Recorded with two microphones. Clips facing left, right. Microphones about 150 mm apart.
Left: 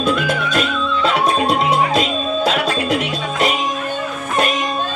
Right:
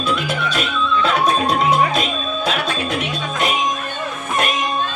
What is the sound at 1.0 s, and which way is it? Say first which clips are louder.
Music: left 3 dB; 30° left (ahead or behind).